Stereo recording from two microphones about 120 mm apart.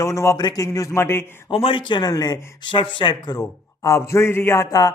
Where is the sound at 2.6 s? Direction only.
45° left (ahead or behind).